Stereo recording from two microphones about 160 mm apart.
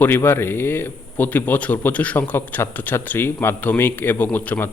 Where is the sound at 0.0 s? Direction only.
15° left (ahead or behind).